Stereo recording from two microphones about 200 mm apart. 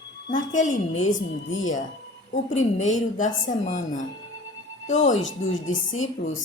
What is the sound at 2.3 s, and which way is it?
A woman's voice, 35° left (ahead or behind).